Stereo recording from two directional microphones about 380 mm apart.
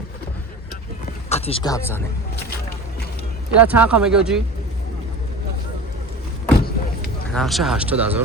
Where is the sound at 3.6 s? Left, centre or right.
Centre.